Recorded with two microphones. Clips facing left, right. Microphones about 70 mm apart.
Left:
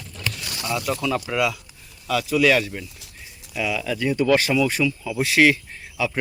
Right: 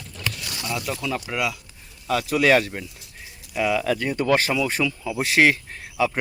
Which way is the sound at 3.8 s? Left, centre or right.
Right.